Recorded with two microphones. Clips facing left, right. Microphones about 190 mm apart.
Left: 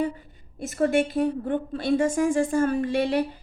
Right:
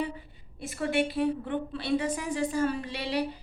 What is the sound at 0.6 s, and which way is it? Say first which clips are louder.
A woman's voice: left 6 dB; 45° left (ahead or behind).